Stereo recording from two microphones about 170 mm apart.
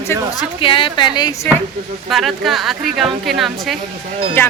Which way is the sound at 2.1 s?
Centre (ahead or behind).